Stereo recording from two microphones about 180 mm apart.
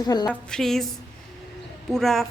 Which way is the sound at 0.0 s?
20° left (ahead or behind).